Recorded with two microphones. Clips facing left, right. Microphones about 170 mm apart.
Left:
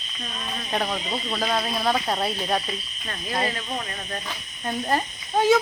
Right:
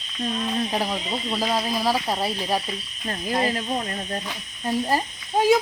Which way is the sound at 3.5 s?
35° right (ahead or behind).